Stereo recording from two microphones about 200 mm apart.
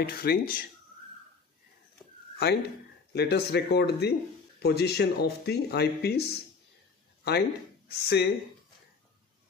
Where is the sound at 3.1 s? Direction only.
55° left (ahead or behind).